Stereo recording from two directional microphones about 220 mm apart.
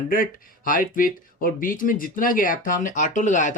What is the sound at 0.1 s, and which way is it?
Speech, 40° left (ahead or behind).